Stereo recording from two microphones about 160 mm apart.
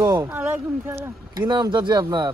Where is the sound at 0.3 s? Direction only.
10° right (ahead or behind).